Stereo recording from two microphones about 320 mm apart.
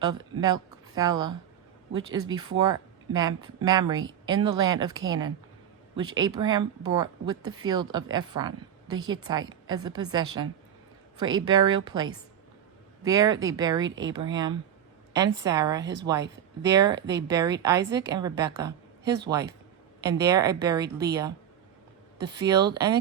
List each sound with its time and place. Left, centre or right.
0.0 s speech: centre
13.8 s speech: right
14.1 s speech: centre